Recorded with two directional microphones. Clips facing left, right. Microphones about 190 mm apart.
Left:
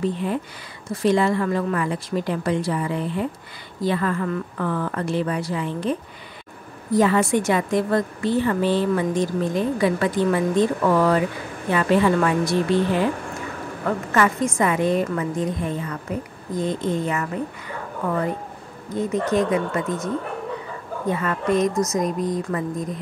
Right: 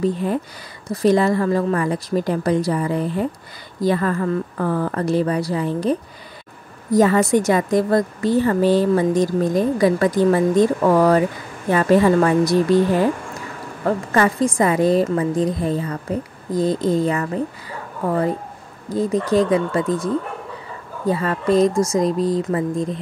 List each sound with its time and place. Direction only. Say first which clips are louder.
0.0 s a woman's voice: right 3 dB; 40° right (ahead or behind)
18.9 s a woman's voice: right 3 dB; 35° right (ahead or behind)
21.1 s a woman's voice: right 4 dB; 30° right (ahead or behind)